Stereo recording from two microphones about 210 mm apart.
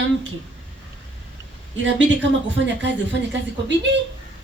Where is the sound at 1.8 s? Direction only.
60° right (ahead or behind).